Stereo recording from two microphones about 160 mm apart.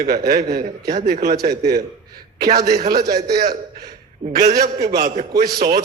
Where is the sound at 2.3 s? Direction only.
80° right.